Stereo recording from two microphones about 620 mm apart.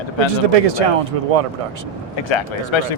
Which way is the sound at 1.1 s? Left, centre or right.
Right.